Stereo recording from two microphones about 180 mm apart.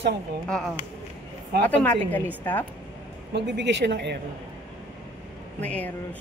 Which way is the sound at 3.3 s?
75° right (ahead or behind).